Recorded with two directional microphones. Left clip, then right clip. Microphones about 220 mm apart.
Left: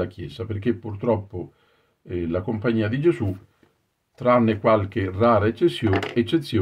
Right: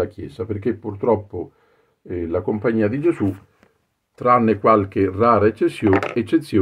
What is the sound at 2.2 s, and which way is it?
Speech, 15° right (ahead or behind).